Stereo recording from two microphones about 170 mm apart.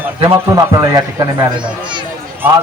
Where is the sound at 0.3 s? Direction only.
20° right (ahead or behind).